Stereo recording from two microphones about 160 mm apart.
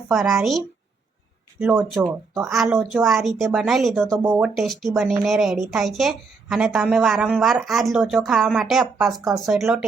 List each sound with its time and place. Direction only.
0.1 s a woman's voice: centre (ahead or behind)
1.5 s speech: 15° right (ahead or behind)
2.6 s a woman's voice: centre (ahead or behind)